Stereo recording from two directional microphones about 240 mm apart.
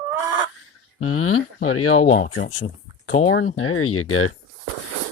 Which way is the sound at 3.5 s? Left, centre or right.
Left.